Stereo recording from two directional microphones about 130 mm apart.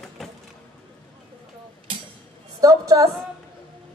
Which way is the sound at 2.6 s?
25° right (ahead or behind).